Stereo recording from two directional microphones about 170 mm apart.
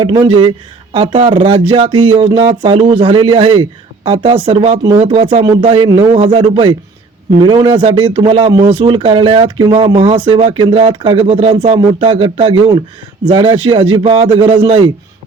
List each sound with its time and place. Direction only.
0.0 s speech: 30° right (ahead or behind)